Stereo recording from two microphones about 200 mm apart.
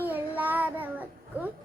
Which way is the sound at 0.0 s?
10° right (ahead or behind).